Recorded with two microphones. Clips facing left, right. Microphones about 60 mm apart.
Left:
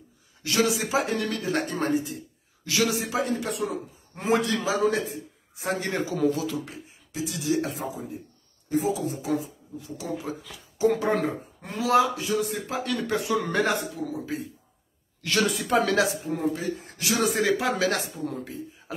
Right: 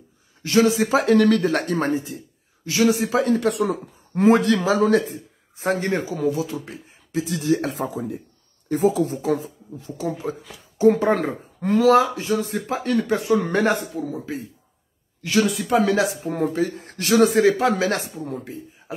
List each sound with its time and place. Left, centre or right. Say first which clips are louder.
0.4 s speech: right 7 dB; right
0.9 s speech: right 10 dB; right
1.9 s a man's voice: right 2 dB; right
3.1 s speech: right 7 dB; right
6.2 s a man's voice: right 2 dB; right
7.2 s speech: right 5 dB; right
10.9 s speech: right 7 dB; right
15.2 s speech: right 4 dB; centre
15.8 s a man's voice: right 2 dB; right
16.3 s speech: right 5 dB; right
17.5 s speech: right 5 dB; right